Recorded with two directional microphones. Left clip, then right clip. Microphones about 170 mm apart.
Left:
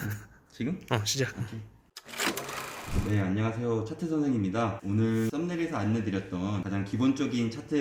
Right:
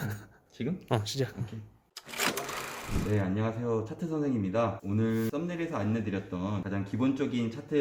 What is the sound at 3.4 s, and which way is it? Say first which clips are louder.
Speech: left 1 dB; 25° right (ahead or behind).